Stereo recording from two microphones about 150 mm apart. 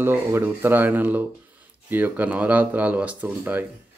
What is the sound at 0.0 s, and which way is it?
Speech, 15° right (ahead or behind).